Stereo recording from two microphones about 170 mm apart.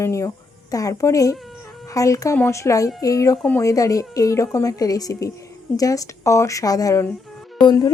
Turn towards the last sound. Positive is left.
turn(degrees=25)  # may be behind; listen again after turning